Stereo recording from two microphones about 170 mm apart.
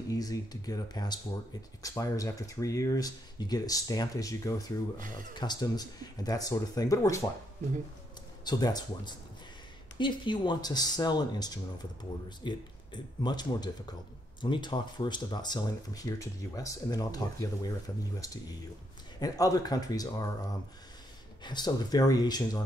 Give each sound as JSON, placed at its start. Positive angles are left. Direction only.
{"t": 0.1, "sound": "speech", "side_deg": 20}
{"t": 8.5, "sound": "speech", "side_deg": 25}
{"t": 21.4, "sound": "speech", "side_deg": 25}